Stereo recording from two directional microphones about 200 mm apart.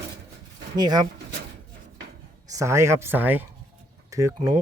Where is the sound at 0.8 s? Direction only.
20° right (ahead or behind).